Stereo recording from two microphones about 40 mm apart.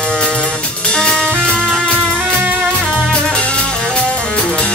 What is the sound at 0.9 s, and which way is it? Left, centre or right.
Music, left.